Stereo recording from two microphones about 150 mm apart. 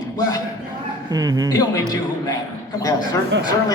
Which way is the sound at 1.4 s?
25° left (ahead or behind).